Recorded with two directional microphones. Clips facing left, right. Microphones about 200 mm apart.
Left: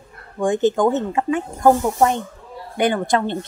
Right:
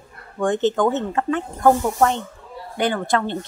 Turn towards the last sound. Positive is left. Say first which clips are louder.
# left 2 dB
turn(degrees=15)  # may be behind; listen again after turning